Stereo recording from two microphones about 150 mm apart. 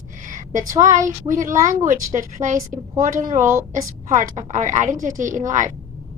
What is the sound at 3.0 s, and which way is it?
Speech, 60° right (ahead or behind).